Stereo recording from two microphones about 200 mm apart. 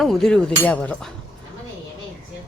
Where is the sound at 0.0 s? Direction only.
Centre (ahead or behind).